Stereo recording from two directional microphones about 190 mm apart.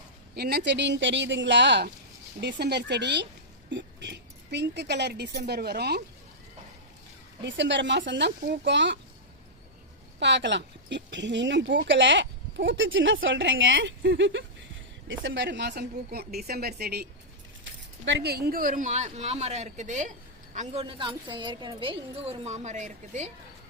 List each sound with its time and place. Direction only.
0.3 s speech: 55° right (ahead or behind)
7.4 s speech: 70° right (ahead or behind)
10.2 s speech: 65° right (ahead or behind)
17.6 s speech: 70° right (ahead or behind); by 23.3 s 40° right (ahead or behind)